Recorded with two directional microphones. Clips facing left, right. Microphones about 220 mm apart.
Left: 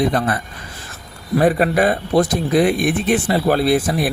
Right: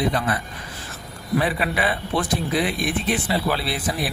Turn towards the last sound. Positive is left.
turn(degrees=45)  # may be behind; listen again after turning